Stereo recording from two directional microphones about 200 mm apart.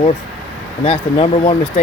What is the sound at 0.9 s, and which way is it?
Speech, 30° left (ahead or behind).